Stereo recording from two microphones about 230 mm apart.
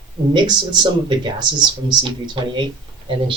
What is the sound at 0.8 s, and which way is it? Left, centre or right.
Speech, centre.